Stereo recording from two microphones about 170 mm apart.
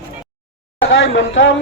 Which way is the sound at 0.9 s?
90° left.